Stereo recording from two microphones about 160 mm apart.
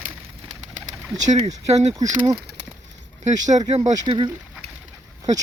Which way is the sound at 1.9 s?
20° right (ahead or behind).